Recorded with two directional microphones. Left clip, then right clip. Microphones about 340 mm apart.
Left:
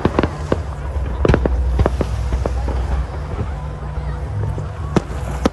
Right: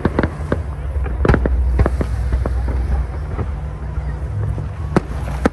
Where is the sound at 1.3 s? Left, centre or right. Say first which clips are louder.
Left 1 dB; centre.